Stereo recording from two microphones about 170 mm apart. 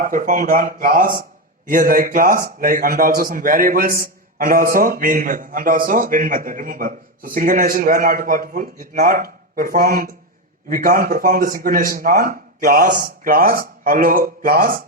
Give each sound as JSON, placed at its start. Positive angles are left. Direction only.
{"t": 0.0, "sound": "a man's voice", "side_deg": -50}